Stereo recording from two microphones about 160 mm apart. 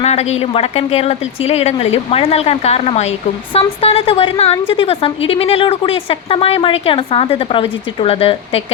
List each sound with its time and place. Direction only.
0.0 s speech: 40° left (ahead or behind)